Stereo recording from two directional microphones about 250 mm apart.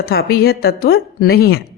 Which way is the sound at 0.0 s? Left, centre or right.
Left.